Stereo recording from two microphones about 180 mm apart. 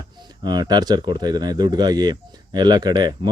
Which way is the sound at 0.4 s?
25° right (ahead or behind).